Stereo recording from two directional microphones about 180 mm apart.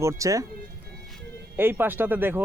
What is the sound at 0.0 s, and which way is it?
Speech, 15° right (ahead or behind).